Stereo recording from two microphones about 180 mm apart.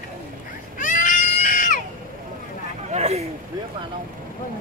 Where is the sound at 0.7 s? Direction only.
45° left (ahead or behind).